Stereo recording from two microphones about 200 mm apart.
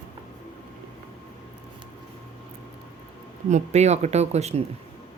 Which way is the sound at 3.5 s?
35° right (ahead or behind).